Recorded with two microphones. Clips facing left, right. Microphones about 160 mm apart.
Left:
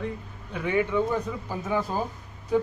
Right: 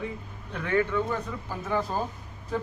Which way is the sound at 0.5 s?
10° left (ahead or behind).